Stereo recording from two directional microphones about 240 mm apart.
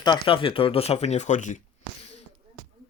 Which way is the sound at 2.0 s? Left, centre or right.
Left.